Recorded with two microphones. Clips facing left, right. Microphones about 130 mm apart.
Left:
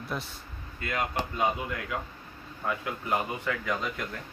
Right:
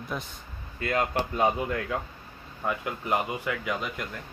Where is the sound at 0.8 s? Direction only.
35° right (ahead or behind).